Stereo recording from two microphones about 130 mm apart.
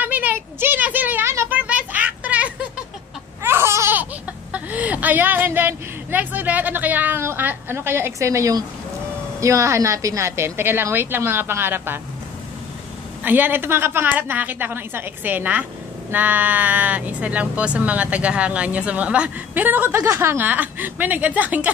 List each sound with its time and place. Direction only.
0.0 s a sound: 15° right (ahead or behind)
3.4 s laughter: 20° right (ahead or behind)
9.4 s speech: 25° right (ahead or behind)
13.2 s speech: 15° right (ahead or behind)